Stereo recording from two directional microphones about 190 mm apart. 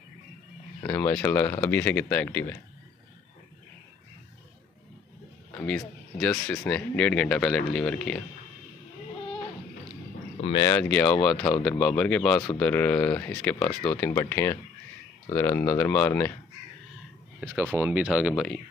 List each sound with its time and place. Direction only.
0.8 s speech: 10° left (ahead or behind)
5.6 s speech: 5° left (ahead or behind)
10.4 s speech: 25° left (ahead or behind)
10.7 s speech: 10° left (ahead or behind)
17.4 s speech: 5° right (ahead or behind)